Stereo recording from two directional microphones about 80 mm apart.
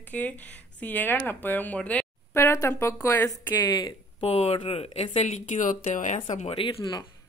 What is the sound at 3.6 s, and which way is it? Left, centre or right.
Speech, left.